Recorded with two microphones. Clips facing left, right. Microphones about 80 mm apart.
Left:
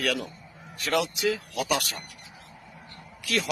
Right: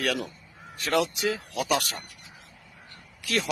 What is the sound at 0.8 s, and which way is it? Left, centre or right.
Speech, right.